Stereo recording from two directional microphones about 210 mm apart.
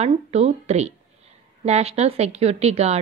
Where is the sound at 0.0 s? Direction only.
30° right (ahead or behind).